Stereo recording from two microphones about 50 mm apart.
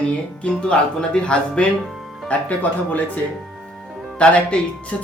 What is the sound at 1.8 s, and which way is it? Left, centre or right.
Music, centre.